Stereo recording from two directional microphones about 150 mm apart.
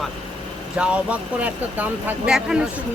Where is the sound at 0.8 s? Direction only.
10° right (ahead or behind).